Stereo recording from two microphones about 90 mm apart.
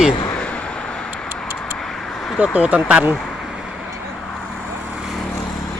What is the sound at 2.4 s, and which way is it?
Speech, 15° right (ahead or behind).